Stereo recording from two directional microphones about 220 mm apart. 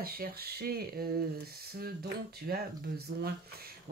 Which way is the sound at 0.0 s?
45° right (ahead or behind).